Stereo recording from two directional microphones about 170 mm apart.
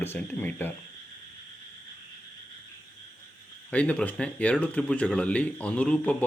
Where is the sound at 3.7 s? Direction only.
10° left (ahead or behind).